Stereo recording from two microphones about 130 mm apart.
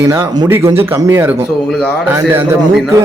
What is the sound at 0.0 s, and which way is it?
A man's voice, 25° right (ahead or behind).